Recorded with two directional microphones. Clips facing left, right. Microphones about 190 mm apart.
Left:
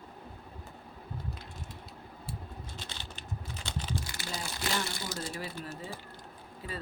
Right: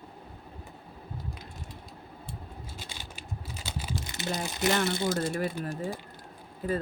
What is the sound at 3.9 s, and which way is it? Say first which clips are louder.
Crumpling: right 5 dB; 20° right (ahead or behind).